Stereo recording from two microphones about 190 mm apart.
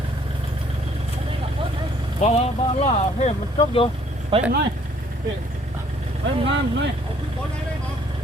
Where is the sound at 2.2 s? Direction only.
35° left (ahead or behind).